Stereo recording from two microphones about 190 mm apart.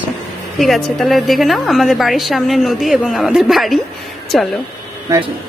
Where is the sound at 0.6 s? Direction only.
Centre (ahead or behind).